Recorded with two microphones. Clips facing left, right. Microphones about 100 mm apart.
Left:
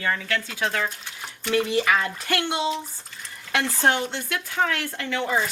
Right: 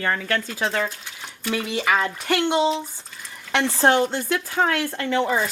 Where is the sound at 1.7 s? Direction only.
20° right (ahead or behind).